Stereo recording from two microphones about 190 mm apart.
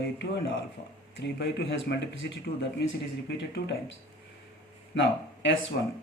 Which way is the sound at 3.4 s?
65° left (ahead or behind).